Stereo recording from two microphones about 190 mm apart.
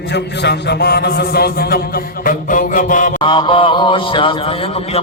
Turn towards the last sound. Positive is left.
turn(degrees=25)  # may be behind; listen again after turning